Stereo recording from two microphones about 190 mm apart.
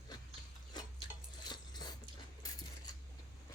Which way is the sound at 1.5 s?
20° left (ahead or behind).